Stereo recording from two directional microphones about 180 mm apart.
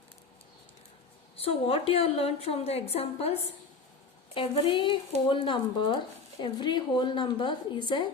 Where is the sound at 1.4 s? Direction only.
35° left (ahead or behind).